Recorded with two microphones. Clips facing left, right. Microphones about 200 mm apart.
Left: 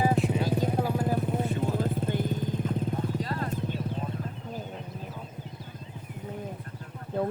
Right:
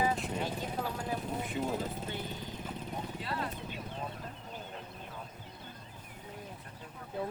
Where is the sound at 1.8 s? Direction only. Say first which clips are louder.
Left 9 dB; 55° left (ahead or behind).